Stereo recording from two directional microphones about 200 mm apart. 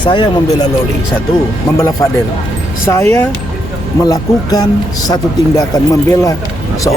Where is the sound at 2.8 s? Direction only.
15° left (ahead or behind).